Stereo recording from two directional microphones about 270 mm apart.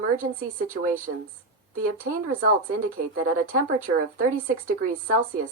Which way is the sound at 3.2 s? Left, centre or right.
Right.